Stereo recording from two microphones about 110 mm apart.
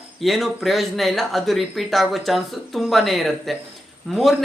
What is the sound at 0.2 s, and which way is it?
Speech, centre (ahead or behind).